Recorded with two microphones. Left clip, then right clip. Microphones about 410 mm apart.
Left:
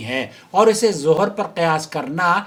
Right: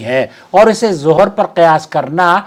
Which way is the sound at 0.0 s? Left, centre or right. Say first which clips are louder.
Right 10 dB; right.